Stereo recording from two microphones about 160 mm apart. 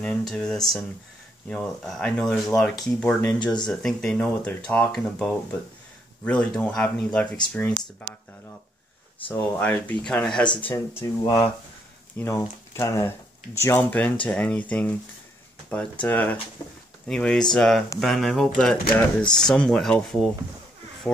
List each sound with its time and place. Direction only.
0.0 s speech: 5° left (ahead or behind)
9.3 s speech: 10° left (ahead or behind)